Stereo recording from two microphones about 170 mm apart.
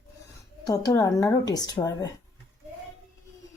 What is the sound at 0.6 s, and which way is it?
Speech, 20° left (ahead or behind).